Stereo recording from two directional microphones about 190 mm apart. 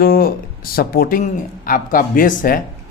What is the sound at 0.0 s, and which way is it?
A man's voice, 50° left (ahead or behind).